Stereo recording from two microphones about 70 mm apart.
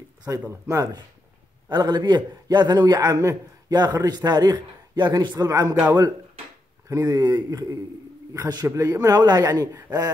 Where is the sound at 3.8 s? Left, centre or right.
Right.